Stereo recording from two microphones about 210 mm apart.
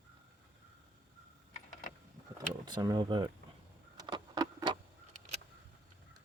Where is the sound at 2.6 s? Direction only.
20° right (ahead or behind).